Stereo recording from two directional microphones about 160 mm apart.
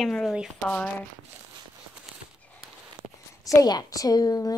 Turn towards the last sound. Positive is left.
turn(degrees=25)  # may be behind; listen again after turning